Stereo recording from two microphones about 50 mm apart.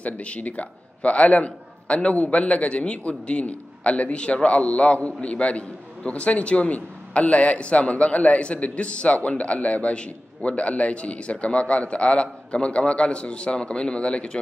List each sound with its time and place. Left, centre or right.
0.0 s a man's voice: left